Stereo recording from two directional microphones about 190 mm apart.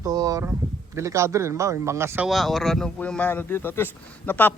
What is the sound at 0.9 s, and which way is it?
A man's voice, 15° right (ahead or behind).